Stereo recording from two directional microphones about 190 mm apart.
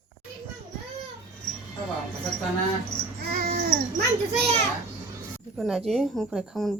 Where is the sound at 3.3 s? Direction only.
50° right (ahead or behind).